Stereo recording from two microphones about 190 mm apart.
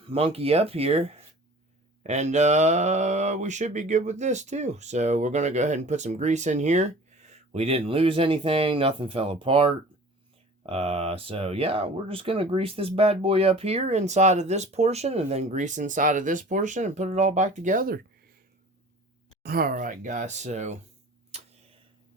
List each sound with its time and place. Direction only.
0.0 s speech: 30° right (ahead or behind); by 18.0 s 50° right (ahead or behind)
19.5 s speech: 50° right (ahead or behind)
21.3 s tick-tock: 35° right (ahead or behind)